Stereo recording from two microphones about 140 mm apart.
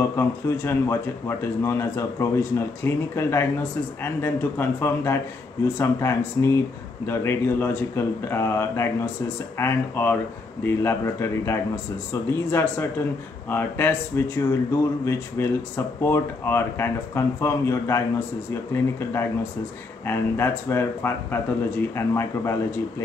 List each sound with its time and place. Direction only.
0.1 s speech: 20° left (ahead or behind)